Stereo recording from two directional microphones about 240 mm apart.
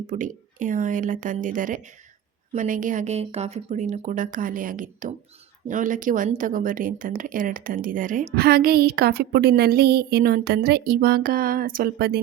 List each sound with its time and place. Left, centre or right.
0.1 s speech: right